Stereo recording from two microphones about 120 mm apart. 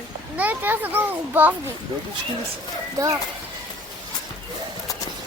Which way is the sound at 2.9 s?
30° right (ahead or behind).